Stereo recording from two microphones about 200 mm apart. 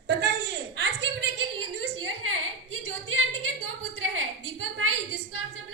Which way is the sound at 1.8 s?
90° right.